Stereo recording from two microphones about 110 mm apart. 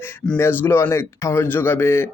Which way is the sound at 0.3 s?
25° left (ahead or behind).